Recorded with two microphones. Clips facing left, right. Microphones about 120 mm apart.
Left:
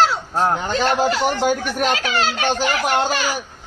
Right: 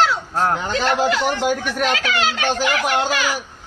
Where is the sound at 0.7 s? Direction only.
35° left (ahead or behind).